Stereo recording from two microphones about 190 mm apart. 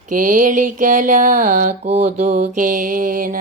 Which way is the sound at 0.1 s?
45° right (ahead or behind).